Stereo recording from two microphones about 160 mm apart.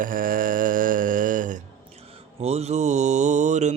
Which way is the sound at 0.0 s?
60° right (ahead or behind).